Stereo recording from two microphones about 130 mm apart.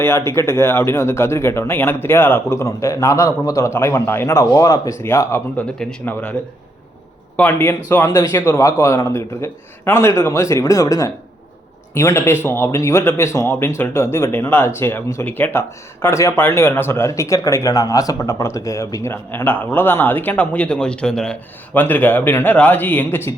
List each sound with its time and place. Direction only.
0.0 s speech: 20° left (ahead or behind)
5.5 s speech: 10° left (ahead or behind)
7.3 s speech: 15° left (ahead or behind)